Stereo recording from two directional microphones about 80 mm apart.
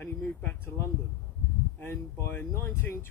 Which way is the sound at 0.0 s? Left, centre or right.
Left.